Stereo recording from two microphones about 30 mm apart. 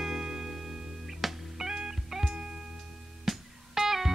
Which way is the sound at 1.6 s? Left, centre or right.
Right.